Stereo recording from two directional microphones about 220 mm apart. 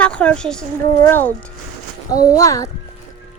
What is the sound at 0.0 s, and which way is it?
A child's voice, 5° left (ahead or behind).